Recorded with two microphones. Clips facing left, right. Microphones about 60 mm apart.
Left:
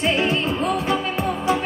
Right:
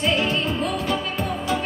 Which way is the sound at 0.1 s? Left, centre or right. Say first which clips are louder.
Left 2 dB; left.